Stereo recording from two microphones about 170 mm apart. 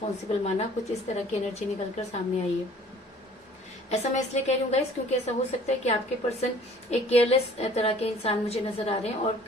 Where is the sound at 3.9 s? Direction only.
40° left (ahead or behind).